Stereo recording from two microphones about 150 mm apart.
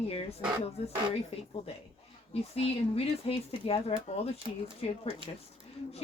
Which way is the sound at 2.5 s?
45° left (ahead or behind).